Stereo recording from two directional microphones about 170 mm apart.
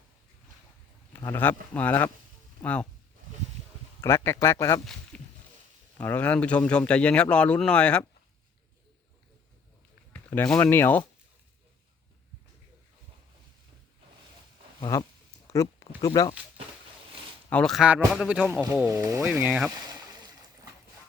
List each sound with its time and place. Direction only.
1.1 s speech: 15° left (ahead or behind)
4.0 s speech: 15° left (ahead or behind)
5.1 s a sound: 10° left (ahead or behind)
6.0 s speech: 10° left (ahead or behind)
10.1 s speech: 10° left (ahead or behind)
14.8 s speech: 20° left (ahead or behind)
15.4 s a sound: 15° left (ahead or behind)
16.0 s speech: 20° left (ahead or behind)
17.5 s speech: 5° left (ahead or behind); by 19.5 s 10° right (ahead or behind)
19.7 s a sound: 25° right (ahead or behind)